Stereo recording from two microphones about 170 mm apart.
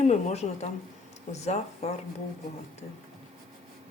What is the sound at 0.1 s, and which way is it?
Speech, 40° left (ahead or behind).